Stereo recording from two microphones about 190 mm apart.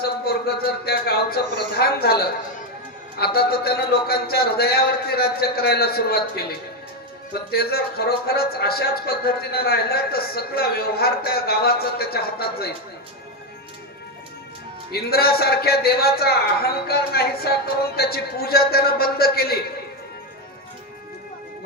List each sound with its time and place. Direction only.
0.0 s a man's voice: 55° left (ahead or behind)
7.5 s speech: 55° left (ahead or behind)
14.9 s a man's voice: 55° left (ahead or behind)